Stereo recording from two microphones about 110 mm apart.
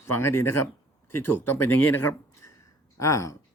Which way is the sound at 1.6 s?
20° left (ahead or behind).